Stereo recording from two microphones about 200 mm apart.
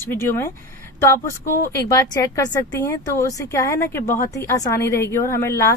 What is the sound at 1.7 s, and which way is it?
A woman's voice, 15° left (ahead or behind).